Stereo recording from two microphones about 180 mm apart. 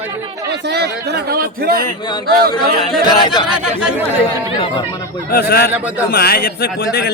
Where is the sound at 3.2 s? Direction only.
25° left (ahead or behind).